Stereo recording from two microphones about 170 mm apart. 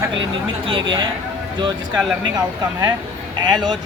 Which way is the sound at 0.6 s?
30° right (ahead or behind).